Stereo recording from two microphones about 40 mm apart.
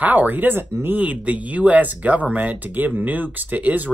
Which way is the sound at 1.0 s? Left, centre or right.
Right.